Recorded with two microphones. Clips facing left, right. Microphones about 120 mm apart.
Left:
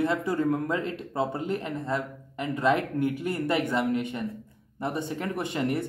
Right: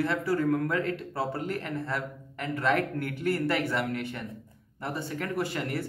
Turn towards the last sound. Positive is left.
turn(degrees=20)  # may be behind; listen again after turning